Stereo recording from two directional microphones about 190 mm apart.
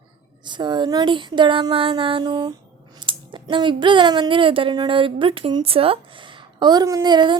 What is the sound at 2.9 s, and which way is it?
Speech, 25° right (ahead or behind).